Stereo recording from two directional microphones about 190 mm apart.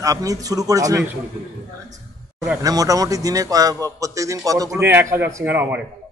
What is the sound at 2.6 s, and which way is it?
A man's voice, 20° right (ahead or behind).